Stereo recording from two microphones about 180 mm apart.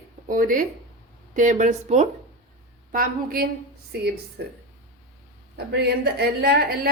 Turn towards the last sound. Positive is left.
turn(degrees=-55)  # may be behind; listen again after turning